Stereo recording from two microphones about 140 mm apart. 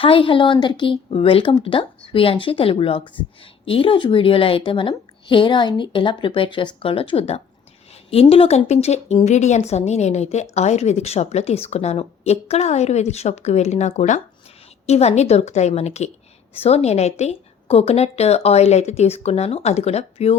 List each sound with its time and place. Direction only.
0.0 s a woman's voice: 40° left (ahead or behind)